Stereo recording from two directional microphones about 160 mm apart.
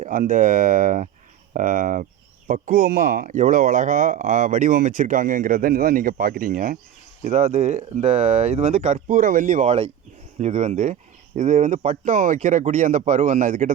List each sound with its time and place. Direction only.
0.0 s speech: 55° right (ahead or behind)